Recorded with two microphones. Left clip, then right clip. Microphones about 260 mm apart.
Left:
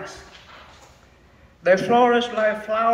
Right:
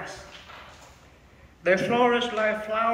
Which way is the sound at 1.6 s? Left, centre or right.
Left.